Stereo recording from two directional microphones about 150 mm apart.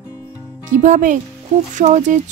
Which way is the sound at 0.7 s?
55° right (ahead or behind).